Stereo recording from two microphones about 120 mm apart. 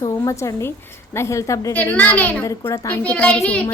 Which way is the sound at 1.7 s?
15° left (ahead or behind).